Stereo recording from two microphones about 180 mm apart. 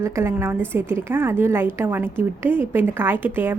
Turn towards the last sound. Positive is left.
turn(degrees=-10)  # may be behind; listen again after turning